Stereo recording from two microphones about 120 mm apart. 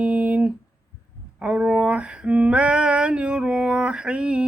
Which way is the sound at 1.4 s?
10° right (ahead or behind).